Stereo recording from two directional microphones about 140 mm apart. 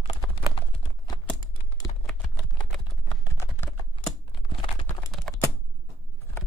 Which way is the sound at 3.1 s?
25° left (ahead or behind).